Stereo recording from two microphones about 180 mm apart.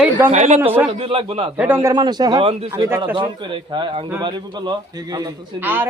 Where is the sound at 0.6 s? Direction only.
10° right (ahead or behind).